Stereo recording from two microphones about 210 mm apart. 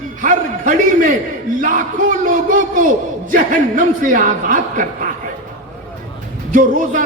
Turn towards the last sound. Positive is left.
turn(degrees=-40)  # may be behind; listen again after turning